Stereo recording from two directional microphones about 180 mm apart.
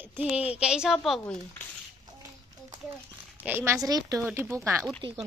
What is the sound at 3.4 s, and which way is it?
A woman's voice, 15° right (ahead or behind).